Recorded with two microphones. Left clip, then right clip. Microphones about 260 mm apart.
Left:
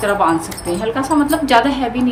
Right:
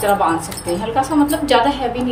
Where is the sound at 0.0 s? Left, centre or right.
Centre.